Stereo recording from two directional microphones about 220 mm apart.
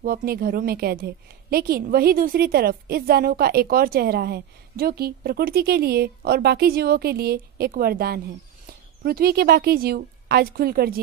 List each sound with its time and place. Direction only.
0.0 s a woman's voice: 40° right (ahead or behind)